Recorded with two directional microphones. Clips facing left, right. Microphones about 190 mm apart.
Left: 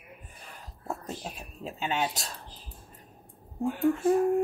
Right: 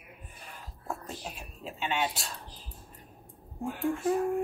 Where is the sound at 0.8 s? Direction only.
40° left (ahead or behind).